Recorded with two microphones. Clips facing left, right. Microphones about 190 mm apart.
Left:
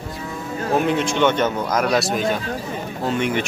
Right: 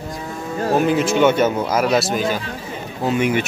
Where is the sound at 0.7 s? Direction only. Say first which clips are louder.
Right 3 dB; 5° right (ahead or behind).